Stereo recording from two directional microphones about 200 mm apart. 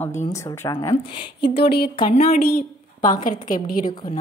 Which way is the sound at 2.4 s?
45° left (ahead or behind).